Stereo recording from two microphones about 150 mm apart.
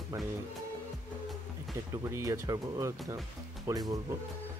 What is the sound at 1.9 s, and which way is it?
Speech, 20° right (ahead or behind).